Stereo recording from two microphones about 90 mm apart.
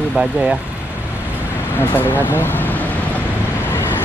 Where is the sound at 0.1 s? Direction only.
5° right (ahead or behind).